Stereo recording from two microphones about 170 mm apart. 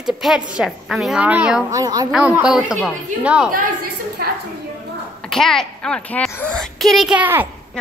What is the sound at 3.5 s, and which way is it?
Speech, 60° right (ahead or behind).